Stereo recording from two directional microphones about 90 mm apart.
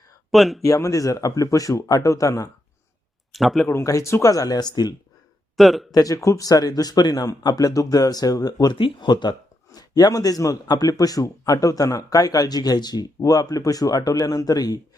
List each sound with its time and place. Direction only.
0.3 s speech: centre (ahead or behind)
0.6 s a man's voice: 35° left (ahead or behind)
3.3 s speech: centre (ahead or behind)
3.7 s a man's voice: 35° left (ahead or behind)
5.5 s speech: centre (ahead or behind)
5.9 s speech: 40° left (ahead or behind)
9.7 s a man's voice: 45° left (ahead or behind)